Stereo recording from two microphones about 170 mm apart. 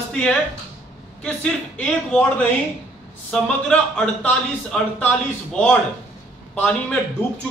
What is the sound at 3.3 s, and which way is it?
Speech, 5° left (ahead or behind).